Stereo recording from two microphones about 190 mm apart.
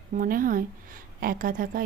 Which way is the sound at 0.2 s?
45° right (ahead or behind).